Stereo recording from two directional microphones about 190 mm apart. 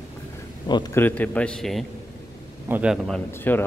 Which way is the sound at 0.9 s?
10° left (ahead or behind).